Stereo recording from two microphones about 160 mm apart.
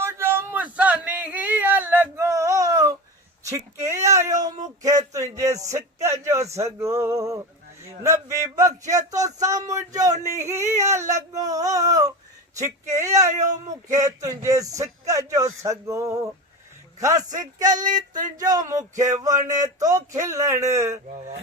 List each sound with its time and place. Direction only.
0.0 s a sound: 15° right (ahead or behind)
4.8 s speech: 20° right (ahead or behind)
13.3 s speech: 50° right (ahead or behind)
13.9 s speech: 20° right (ahead or behind)
17.2 s speech: 50° right (ahead or behind)
18.3 s speech: 25° right (ahead or behind)
18.9 s speech: 50° right (ahead or behind)
19.5 s speech: 20° right (ahead or behind)